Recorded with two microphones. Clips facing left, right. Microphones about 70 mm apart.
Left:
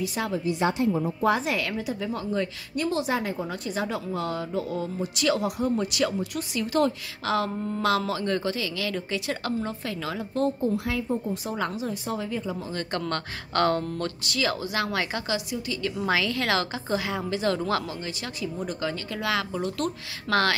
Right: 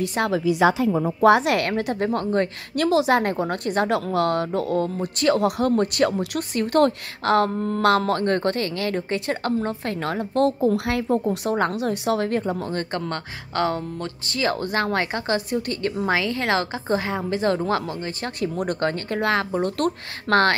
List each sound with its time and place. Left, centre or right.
0.0 s a woman's voice: right
0.3 s a woman's voice: right
1.2 s a woman's voice: right
2.8 s a woman's voice: right
5.6 s speech: right
5.9 s a woman's voice: right
11.5 s a woman's voice: right
12.9 s speech: right
14.2 s speech: right
16.1 s a woman's voice: right
18.6 s a woman's voice: right